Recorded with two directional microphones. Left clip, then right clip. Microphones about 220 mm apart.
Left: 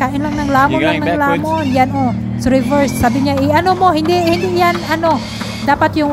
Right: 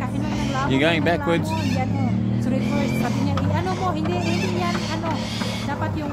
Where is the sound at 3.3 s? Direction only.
35° left (ahead or behind).